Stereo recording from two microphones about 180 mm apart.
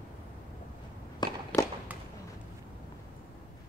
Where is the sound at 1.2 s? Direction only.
15° left (ahead or behind).